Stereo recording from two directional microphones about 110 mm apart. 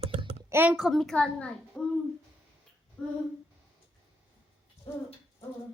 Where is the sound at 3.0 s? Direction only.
10° left (ahead or behind).